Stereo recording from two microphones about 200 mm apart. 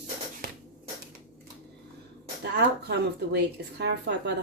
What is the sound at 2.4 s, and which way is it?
Speech, 55° right (ahead or behind).